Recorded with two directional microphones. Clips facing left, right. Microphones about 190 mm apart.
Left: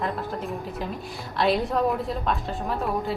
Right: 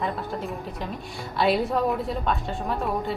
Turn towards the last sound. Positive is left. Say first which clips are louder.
# even
turn(degrees=0)  # may be behind; listen again after turning